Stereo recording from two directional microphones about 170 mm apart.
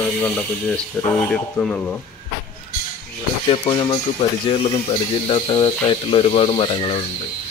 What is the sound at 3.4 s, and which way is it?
Speech, 30° left (ahead or behind).